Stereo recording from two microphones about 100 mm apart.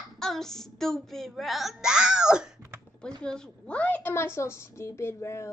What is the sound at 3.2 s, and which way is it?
A woman's voice, 10° left (ahead or behind).